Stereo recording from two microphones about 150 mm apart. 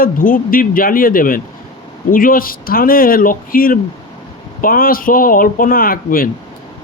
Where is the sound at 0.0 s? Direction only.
70° left (ahead or behind).